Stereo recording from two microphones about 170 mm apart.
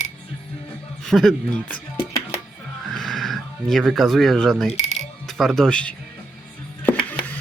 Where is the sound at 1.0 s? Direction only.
Centre (ahead or behind).